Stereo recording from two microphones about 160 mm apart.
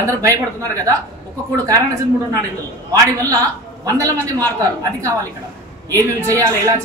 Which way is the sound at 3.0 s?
20° right (ahead or behind).